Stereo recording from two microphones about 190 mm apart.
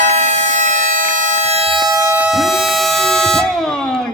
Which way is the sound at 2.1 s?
5° right (ahead or behind).